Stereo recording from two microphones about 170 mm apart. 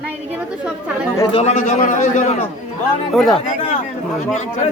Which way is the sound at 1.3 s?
45° left (ahead or behind).